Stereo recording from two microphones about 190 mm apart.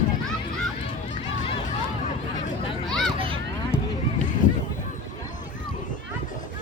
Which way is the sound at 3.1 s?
30° right (ahead or behind).